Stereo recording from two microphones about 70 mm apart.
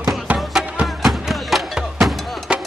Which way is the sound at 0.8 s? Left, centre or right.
Centre.